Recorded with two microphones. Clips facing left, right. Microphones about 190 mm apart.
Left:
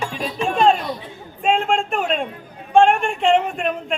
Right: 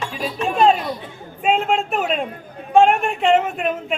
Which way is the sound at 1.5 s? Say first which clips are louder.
Even; 5° right (ahead or behind).